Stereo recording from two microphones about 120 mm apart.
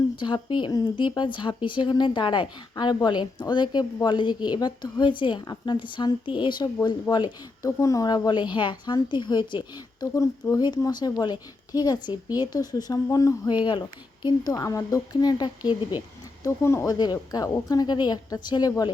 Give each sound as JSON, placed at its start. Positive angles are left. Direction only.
{"t": 0.2, "sound": "speech", "side_deg": 40}
{"t": 14.5, "sound": "a woman's voice", "side_deg": 30}
{"t": 16.4, "sound": "speech", "side_deg": 25}